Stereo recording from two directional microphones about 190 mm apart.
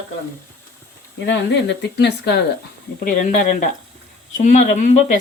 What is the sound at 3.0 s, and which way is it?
Speech, 45° left (ahead or behind).